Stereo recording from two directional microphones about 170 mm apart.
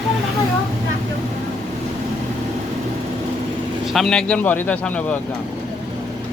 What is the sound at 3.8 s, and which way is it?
Speech, centre (ahead or behind).